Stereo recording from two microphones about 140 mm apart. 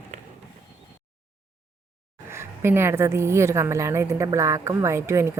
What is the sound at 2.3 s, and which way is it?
A woman's voice, 20° right (ahead or behind).